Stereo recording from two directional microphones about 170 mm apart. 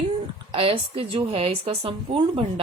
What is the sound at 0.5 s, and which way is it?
Speech, 35° right (ahead or behind).